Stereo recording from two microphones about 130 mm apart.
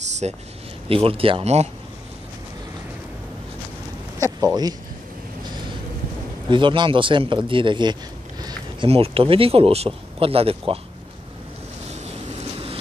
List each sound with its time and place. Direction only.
0.2 s speech: 55° right (ahead or behind)
0.8 s speech: 45° right (ahead or behind)
4.4 s speech: 30° right (ahead or behind)
6.5 s speech: 40° right (ahead or behind)
8.8 s speech: 50° right (ahead or behind)